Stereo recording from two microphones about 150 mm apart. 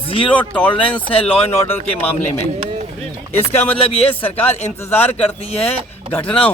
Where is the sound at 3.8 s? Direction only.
35° left (ahead or behind).